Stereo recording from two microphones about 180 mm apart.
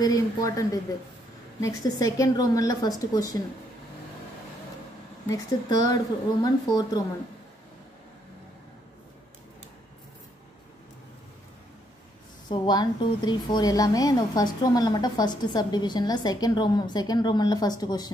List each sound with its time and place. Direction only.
0.0 s a woman's voice: 20° left (ahead or behind)
5.3 s a woman's voice: 20° left (ahead or behind)
12.4 s a woman's voice: 25° left (ahead or behind)